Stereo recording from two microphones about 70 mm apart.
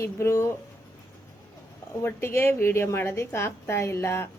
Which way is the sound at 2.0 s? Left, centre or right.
Left.